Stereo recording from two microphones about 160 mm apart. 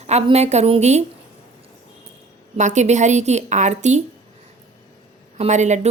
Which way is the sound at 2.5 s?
45° right (ahead or behind).